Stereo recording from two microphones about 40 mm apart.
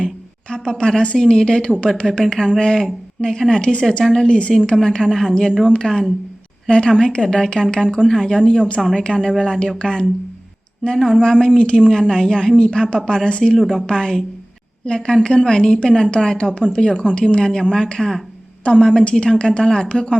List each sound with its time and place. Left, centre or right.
0.5 s a woman's voice: left
10.8 s speech: centre
11.2 s a woman's voice: left
13.6 s speech: centre
13.8 s a woman's voice: centre